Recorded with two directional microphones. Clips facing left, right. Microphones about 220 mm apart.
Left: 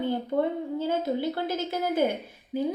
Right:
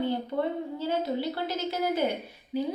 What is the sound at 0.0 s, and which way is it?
A woman's voice, 50° left (ahead or behind).